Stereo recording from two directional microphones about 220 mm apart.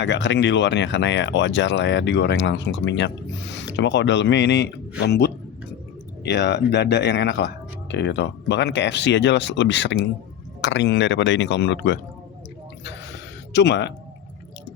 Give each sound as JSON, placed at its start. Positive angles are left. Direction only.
{"t": 0.0, "sound": "speech", "side_deg": 50}
{"t": 13.5, "sound": "speech", "side_deg": 50}